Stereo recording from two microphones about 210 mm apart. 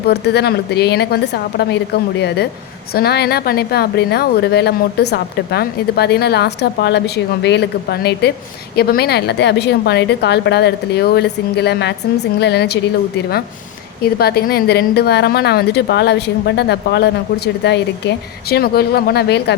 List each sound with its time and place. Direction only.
0.1 s a woman's voice: 50° left (ahead or behind)
14.0 s a woman's voice: 50° left (ahead or behind)